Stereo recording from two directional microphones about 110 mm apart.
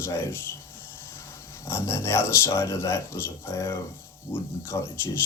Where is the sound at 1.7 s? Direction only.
25° left (ahead or behind).